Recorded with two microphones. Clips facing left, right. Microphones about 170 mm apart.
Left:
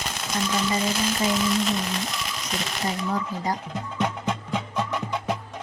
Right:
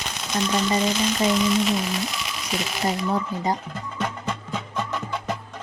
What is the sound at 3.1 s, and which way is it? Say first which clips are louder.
Speech: right 3 dB; 25° right (ahead or behind).